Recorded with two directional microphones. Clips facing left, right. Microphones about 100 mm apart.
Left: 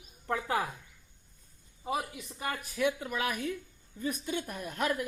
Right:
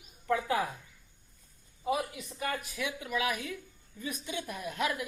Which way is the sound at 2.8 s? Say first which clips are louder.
Left 2 dB; 40° left (ahead or behind).